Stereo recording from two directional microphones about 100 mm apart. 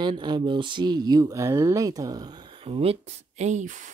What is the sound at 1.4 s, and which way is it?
Speech, 30° right (ahead or behind).